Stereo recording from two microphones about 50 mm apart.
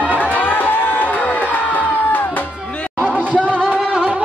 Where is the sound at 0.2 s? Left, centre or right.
Left.